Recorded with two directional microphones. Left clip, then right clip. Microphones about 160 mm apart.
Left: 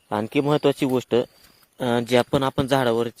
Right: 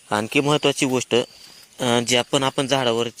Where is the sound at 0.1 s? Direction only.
5° left (ahead or behind).